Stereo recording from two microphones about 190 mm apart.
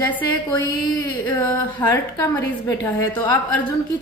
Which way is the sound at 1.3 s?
20° left (ahead or behind).